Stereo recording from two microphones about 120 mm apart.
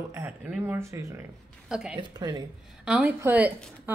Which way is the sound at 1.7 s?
5° right (ahead or behind).